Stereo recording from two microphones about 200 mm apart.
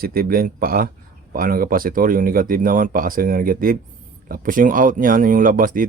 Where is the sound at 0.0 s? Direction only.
50° right (ahead or behind).